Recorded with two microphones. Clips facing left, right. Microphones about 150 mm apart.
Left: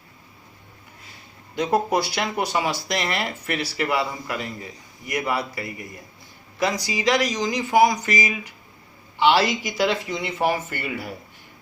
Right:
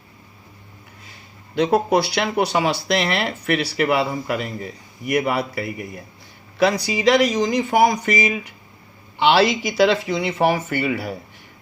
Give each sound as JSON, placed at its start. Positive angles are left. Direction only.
{"t": 1.5, "sound": "speech", "side_deg": -65}